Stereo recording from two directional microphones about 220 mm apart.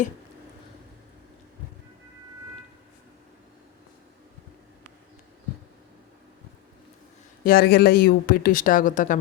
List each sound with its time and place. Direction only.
7.4 s speech: 45° left (ahead or behind)